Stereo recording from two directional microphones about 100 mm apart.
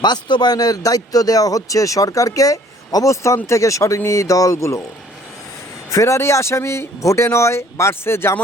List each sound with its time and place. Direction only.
0.0 s speech: 45° left (ahead or behind); by 4.8 s 30° left (ahead or behind)
5.9 s speech: 30° left (ahead or behind)